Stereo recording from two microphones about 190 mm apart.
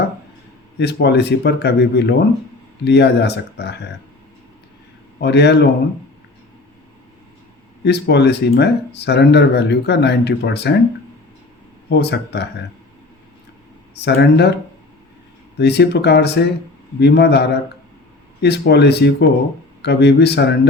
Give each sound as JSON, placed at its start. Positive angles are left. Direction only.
{"t": 0.8, "sound": "speech", "side_deg": 60}
{"t": 5.2, "sound": "speech", "side_deg": 60}
{"t": 7.9, "sound": "speech", "side_deg": 60}
{"t": 11.9, "sound": "speech", "side_deg": 60}
{"t": 13.9, "sound": "speech", "side_deg": 60}
{"t": 15.5, "sound": "speech", "side_deg": 60}